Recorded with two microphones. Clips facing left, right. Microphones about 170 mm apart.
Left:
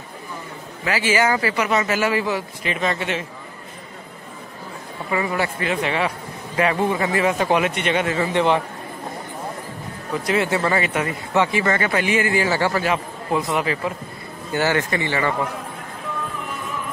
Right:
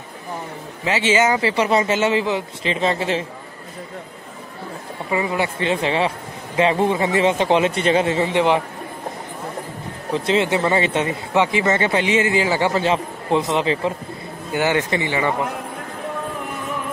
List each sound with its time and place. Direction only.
0.8 s speech: 25° right (ahead or behind)
5.1 s speech: 20° right (ahead or behind)
10.1 s speech: 25° right (ahead or behind)